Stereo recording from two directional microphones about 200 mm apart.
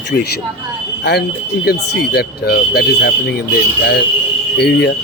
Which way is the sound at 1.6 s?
55° left (ahead or behind).